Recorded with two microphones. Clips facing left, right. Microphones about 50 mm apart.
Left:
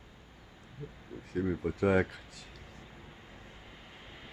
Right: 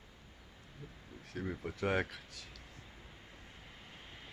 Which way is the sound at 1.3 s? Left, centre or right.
Centre.